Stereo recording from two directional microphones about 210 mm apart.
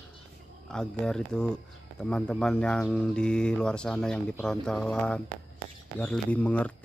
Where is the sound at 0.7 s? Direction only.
5° left (ahead or behind).